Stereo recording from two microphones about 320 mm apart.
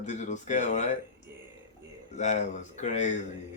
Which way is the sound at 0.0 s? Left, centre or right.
Left.